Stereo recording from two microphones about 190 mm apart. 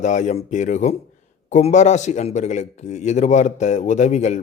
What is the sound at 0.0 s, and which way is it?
A man's voice, 40° left (ahead or behind).